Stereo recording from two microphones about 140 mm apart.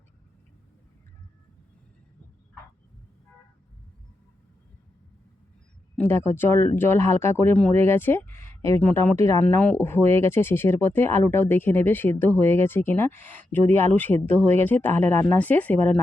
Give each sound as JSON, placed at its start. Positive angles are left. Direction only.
{"t": 6.0, "sound": "speech", "side_deg": 15}
{"t": 9.4, "sound": "speech", "side_deg": 10}